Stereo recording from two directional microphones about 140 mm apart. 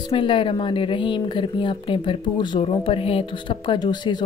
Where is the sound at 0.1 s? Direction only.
35° left (ahead or behind).